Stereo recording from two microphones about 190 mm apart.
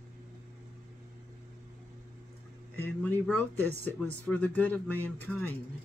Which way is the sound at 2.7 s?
10° left (ahead or behind).